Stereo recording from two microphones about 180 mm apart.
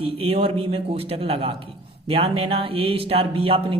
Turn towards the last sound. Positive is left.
turn(degrees=-30)  # may be behind; listen again after turning